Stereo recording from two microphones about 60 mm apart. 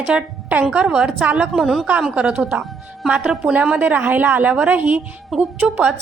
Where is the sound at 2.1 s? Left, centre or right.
Centre.